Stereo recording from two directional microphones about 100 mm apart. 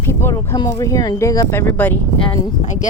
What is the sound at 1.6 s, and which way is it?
Speech, 20° left (ahead or behind).